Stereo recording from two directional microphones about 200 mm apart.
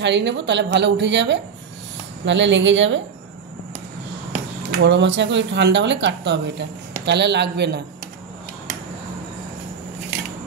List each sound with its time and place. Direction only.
0.0 s speech: 60° right (ahead or behind)
4.6 s speech: 60° right (ahead or behind)